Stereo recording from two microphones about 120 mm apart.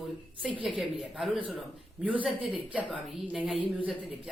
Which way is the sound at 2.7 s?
10° right (ahead or behind).